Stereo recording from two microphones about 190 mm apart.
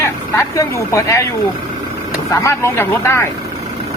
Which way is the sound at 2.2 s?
15° left (ahead or behind).